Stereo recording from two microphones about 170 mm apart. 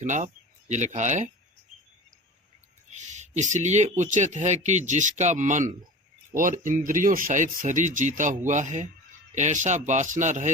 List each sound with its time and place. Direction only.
0.0 s speech: 45° right (ahead or behind)
2.9 s speech: 45° right (ahead or behind)
6.7 s speech: 50° right (ahead or behind)